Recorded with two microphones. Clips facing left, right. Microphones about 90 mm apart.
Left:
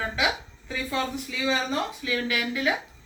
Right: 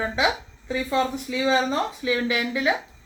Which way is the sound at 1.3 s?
35° right (ahead or behind).